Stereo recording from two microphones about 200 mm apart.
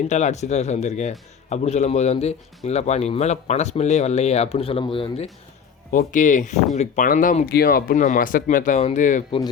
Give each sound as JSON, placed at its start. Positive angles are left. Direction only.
{"t": 0.1, "sound": "speech", "side_deg": 35}
{"t": 5.9, "sound": "speech", "side_deg": 40}